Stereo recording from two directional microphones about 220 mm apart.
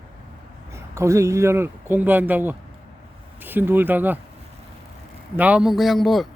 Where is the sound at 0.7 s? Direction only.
15° right (ahead or behind).